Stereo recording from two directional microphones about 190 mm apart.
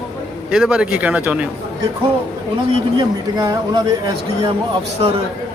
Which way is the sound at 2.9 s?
20° right (ahead or behind).